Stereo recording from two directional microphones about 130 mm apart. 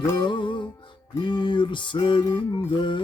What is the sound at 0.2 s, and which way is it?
Music, 35° left (ahead or behind).